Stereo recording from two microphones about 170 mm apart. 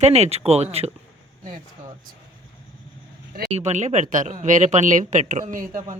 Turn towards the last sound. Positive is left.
turn(degrees=-50)  # may be behind; listen again after turning